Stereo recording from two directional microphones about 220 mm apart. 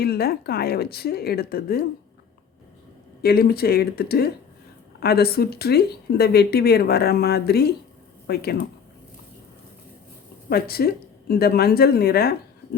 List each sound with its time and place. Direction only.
0.0 s speech: 45° left (ahead or behind)
3.2 s speech: 45° left (ahead or behind)
10.5 s speech: 45° left (ahead or behind)